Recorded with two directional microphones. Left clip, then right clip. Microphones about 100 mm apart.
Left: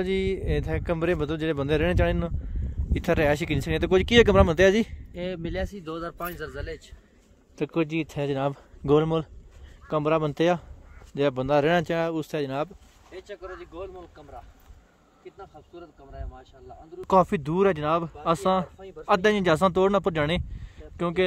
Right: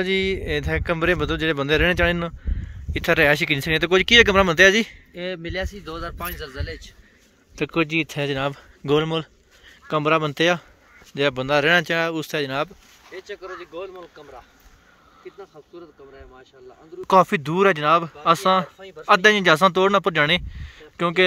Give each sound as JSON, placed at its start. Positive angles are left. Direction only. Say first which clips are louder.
{"t": 0.0, "sound": "speech", "louder": "right 5 dB", "side_deg": 5}
{"t": 2.5, "sound": "speech", "louder": "right 4 dB", "side_deg": 25}
{"t": 4.0, "sound": "speech", "louder": "right 4 dB", "side_deg": 45}
{"t": 7.5, "sound": "speech", "louder": "right 5 dB", "side_deg": 15}
{"t": 8.4, "sound": "speech", "louder": "right 3 dB", "side_deg": 30}
{"t": 8.8, "sound": "a sound", "louder": "right 1 dB", "side_deg": 40}
{"t": 9.8, "sound": "speech", "louder": "right 4 dB", "side_deg": 20}
{"t": 12.0, "sound": "speech", "louder": "right 4 dB", "side_deg": 20}
{"t": 17.1, "sound": "speech", "louder": "right 5 dB", "side_deg": 15}